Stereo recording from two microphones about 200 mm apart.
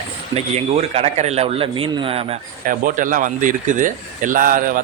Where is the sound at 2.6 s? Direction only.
40° right (ahead or behind).